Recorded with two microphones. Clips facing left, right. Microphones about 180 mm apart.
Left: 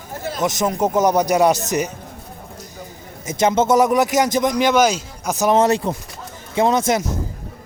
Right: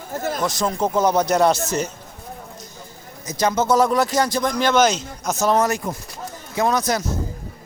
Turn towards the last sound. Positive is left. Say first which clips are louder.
# left 3 dB
turn(degrees=25)  # may be behind; listen again after turning